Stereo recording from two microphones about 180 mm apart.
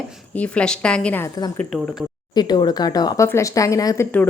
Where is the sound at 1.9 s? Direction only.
25° left (ahead or behind).